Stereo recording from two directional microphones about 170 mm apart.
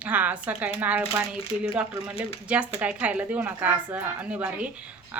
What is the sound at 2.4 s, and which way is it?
Speech, 5° right (ahead or behind).